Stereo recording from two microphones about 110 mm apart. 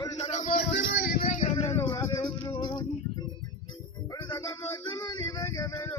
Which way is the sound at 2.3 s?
40° left (ahead or behind).